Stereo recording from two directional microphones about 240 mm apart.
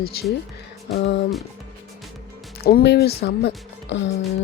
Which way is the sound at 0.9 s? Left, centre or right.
Left.